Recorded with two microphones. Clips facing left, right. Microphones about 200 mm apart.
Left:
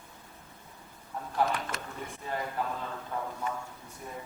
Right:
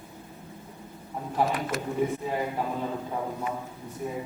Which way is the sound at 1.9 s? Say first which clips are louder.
Right 10 dB; 10° right (ahead or behind).